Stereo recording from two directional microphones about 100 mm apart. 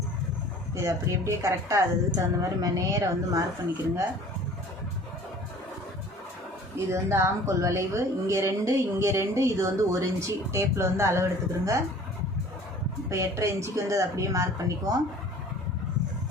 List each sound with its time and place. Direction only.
0.8 s speech: 30° right (ahead or behind)
6.7 s speech: 30° right (ahead or behind)
13.1 s speech: 30° right (ahead or behind)